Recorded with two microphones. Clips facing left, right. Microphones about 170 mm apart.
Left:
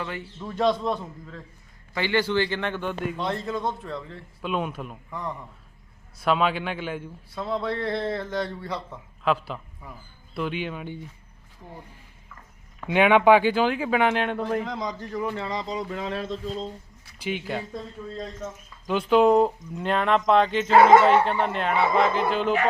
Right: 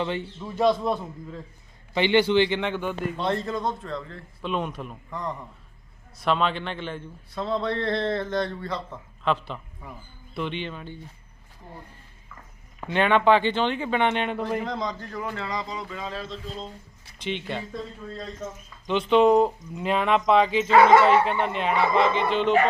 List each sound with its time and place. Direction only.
0.0 s speech: 25° right (ahead or behind)
0.3 s a man's voice: 5° right (ahead or behind)
1.9 s speech: 20° right (ahead or behind)
3.2 s a man's voice: 5° left (ahead or behind)
12.9 s speech: 10° left (ahead or behind); by 15.9 s 30° left (ahead or behind)
15.9 s speech: 65° left (ahead or behind)
17.2 s speech: 5° left (ahead or behind)
18.9 s speech: 5° left (ahead or behind)